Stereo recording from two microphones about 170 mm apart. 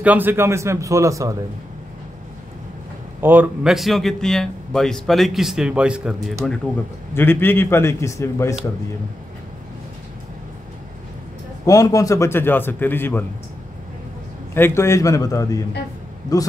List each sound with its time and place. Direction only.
0.0 s a man's voice: 10° right (ahead or behind)
3.2 s a man's voice: 10° right (ahead or behind); by 8.5 s 15° left (ahead or behind)
11.6 s a man's voice: 20° left (ahead or behind)
14.5 s a man's voice: 15° left (ahead or behind)